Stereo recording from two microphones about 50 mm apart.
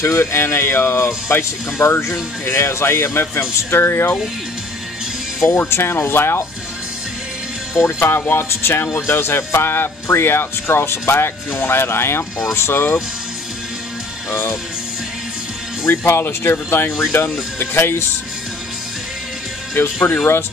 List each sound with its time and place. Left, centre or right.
0.0 s speech: left
5.4 s speech: left
8.1 s speech: left
15.9 s speech: left
19.7 s speech: left